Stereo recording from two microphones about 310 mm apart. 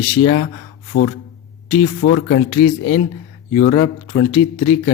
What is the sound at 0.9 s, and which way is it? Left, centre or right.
A man's voice, left.